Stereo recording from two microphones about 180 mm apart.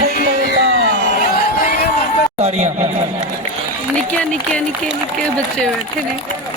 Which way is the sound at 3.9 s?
5° left (ahead or behind).